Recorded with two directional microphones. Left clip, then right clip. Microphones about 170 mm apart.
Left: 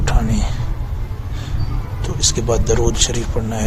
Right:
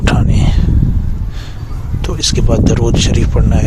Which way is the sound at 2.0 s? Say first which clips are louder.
Right 3 dB; 40° right (ahead or behind).